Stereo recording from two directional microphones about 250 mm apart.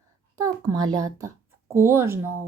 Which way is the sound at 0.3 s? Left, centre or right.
Centre.